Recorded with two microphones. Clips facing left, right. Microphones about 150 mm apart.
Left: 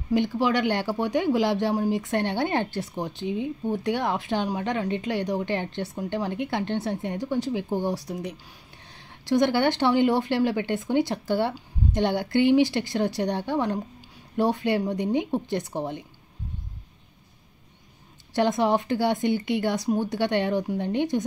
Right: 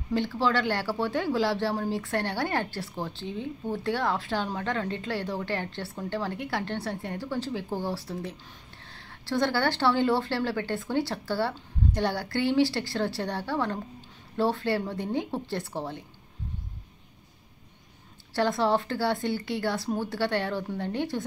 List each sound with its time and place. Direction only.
0.1 s a woman's voice: 15° left (ahead or behind)
18.3 s a woman's voice: 20° left (ahead or behind)